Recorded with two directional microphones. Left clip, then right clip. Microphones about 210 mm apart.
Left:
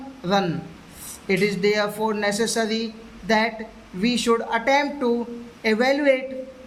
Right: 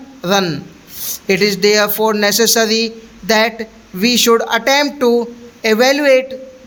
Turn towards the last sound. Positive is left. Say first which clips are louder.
# right 9 dB
turn(degrees=-45)  # may be behind; listen again after turning